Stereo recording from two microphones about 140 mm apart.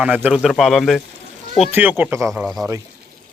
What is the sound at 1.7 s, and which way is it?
Speech, 15° right (ahead or behind).